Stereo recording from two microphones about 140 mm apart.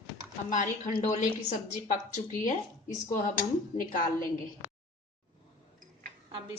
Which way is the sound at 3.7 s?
70° left (ahead or behind).